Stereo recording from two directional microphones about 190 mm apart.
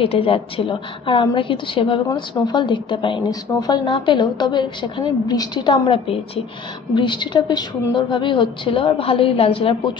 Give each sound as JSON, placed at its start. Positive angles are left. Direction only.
{"t": 0.0, "sound": "a woman's voice", "side_deg": 30}